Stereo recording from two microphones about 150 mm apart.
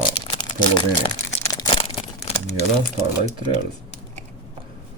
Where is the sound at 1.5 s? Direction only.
30° left (ahead or behind).